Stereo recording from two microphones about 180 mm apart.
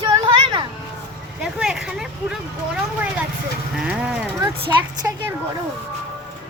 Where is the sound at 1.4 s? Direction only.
5° right (ahead or behind).